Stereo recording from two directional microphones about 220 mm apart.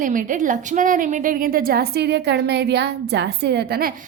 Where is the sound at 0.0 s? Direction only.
35° right (ahead or behind).